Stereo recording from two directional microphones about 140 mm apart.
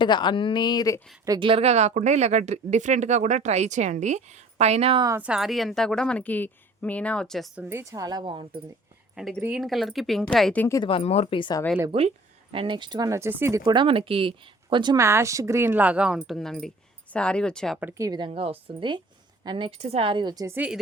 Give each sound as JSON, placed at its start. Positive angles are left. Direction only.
{"t": 0.0, "sound": "speech", "side_deg": 35}
{"t": 1.4, "sound": "speech", "side_deg": -40}
{"t": 4.9, "sound": "speech", "side_deg": -25}
{"t": 5.2, "sound": "speech", "side_deg": -5}
{"t": 7.6, "sound": "speech", "side_deg": -15}
{"t": 9.4, "sound": "speech", "side_deg": -5}
{"t": 10.6, "sound": "speech", "side_deg": 20}
{"t": 10.8, "sound": "speech", "side_deg": 45}
{"t": 11.9, "sound": "speech", "side_deg": -40}
{"t": 13.7, "sound": "speech", "side_deg": -35}
{"t": 14.9, "sound": "speech", "side_deg": -20}
{"t": 17.7, "sound": "speech", "side_deg": -15}
{"t": 18.3, "sound": "speech", "side_deg": -45}